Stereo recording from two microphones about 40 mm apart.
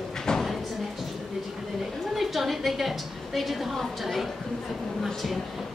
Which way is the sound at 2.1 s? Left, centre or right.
Centre.